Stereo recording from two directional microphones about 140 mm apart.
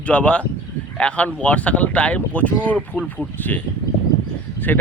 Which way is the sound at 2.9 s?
5° right (ahead or behind).